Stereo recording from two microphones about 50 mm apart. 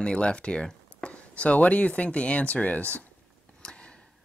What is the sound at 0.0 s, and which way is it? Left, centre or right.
Speech, centre.